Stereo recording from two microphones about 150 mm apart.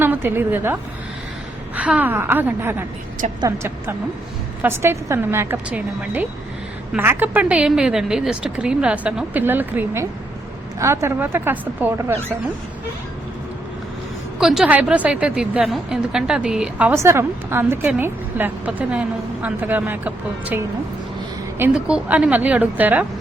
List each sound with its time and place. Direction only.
0.0 s a woman's voice: 15° right (ahead or behind)
14.3 s a woman's voice: 5° right (ahead or behind)
21.6 s a woman's voice: 5° right (ahead or behind)